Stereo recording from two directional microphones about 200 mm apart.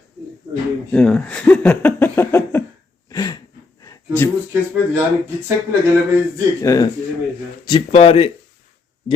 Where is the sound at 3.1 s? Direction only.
20° left (ahead or behind).